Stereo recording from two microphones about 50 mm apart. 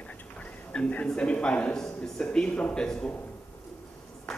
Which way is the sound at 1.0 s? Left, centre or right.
Left.